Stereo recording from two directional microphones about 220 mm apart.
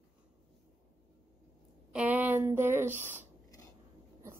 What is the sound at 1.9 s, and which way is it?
Speech, 5° right (ahead or behind).